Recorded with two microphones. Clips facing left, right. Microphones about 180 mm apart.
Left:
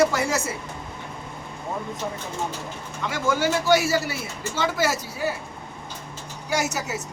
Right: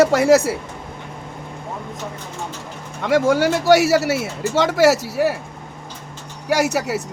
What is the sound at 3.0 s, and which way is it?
Speech, 70° right (ahead or behind).